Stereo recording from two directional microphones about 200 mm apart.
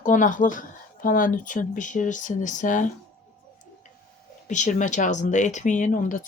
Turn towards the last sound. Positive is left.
turn(degrees=40)  # may be behind; listen again after turning